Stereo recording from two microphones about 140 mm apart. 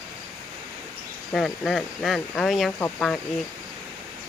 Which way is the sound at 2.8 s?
15° left (ahead or behind).